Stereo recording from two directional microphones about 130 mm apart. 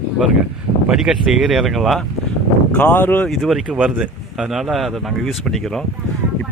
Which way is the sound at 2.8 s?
15° left (ahead or behind).